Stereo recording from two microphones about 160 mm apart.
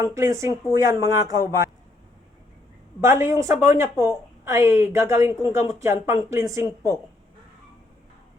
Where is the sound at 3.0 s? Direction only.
15° right (ahead or behind).